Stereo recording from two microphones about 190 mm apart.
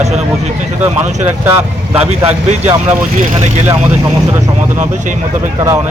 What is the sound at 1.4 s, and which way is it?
Speech, 15° right (ahead or behind).